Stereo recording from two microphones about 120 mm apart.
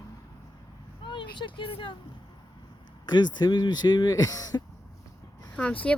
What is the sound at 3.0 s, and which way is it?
Speech, 35° left (ahead or behind).